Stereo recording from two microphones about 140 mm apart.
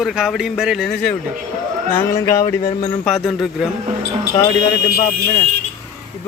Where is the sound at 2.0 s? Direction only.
20° left (ahead or behind).